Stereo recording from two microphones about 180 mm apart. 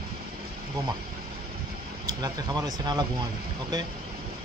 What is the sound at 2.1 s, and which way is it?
Speech, 20° right (ahead or behind).